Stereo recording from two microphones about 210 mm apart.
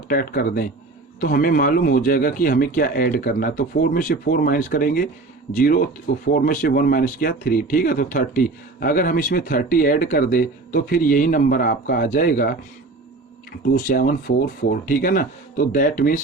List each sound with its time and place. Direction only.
0.1 s speech: 45° left (ahead or behind)
13.7 s speech: 40° left (ahead or behind)